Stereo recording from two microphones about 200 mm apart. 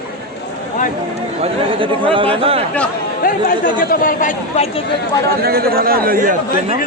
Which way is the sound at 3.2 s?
45° left (ahead or behind).